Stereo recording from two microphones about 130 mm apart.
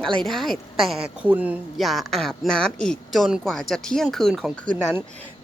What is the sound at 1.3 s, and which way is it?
Speech, 10° right (ahead or behind).